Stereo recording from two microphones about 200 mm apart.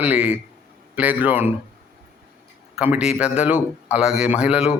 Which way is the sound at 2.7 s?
5° right (ahead or behind).